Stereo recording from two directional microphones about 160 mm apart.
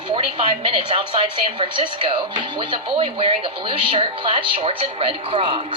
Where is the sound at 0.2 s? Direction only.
35° right (ahead or behind).